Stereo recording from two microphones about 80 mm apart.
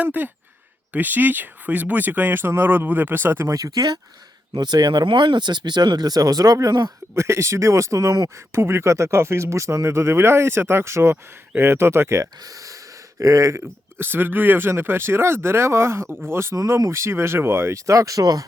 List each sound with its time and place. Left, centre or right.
0.0 s speech: right
3.5 s speech: right
7.2 s speech: right
8.5 s speech: right
12.5 s a sound: right
13.1 s speech: right
14.0 s speech: right
16.6 s speech: right